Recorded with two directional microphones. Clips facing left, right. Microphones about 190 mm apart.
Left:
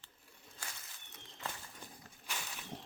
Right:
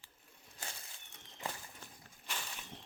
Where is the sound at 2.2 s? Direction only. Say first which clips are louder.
Even; 5° left (ahead or behind).